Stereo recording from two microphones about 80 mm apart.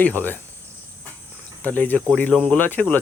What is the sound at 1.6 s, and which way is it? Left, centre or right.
Speech, left.